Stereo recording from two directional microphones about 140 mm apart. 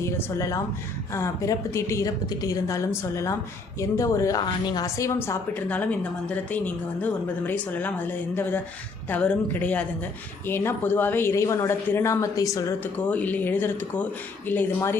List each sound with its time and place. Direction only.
0.0 s a woman's voice: 20° left (ahead or behind)